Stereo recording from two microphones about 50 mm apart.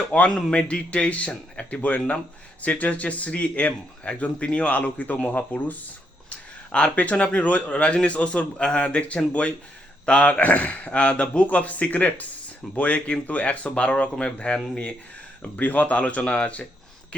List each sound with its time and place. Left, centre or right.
0.1 s speech: left
6.7 s speech: left
15.4 s speech: left